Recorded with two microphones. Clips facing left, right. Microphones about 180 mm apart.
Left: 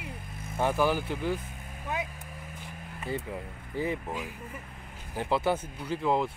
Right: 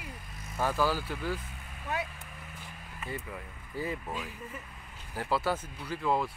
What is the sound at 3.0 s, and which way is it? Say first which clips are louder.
Music: left 5 dB; 30° left (ahead or behind).